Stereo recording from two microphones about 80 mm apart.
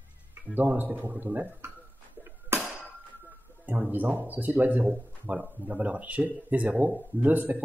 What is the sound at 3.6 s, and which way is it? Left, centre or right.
Speech, right.